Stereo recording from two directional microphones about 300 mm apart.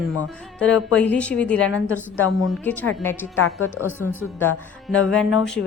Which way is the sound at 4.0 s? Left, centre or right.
Left.